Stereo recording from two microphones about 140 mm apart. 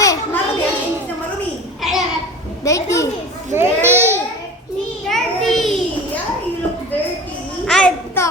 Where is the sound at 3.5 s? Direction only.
15° right (ahead or behind).